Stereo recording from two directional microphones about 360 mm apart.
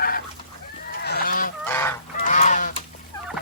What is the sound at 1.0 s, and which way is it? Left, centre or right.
Goose, left.